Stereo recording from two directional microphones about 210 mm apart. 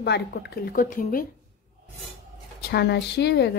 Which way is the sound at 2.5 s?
50° left (ahead or behind).